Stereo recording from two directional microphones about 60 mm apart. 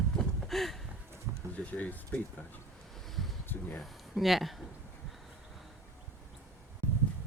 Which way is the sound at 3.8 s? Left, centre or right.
Centre.